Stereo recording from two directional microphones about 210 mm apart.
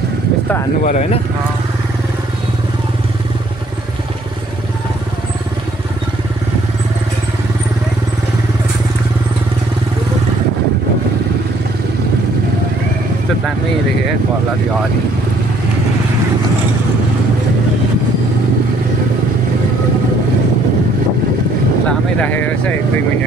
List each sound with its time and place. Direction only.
0.8 s speech: 35° left (ahead or behind)
21.8 s speech: 5° left (ahead or behind)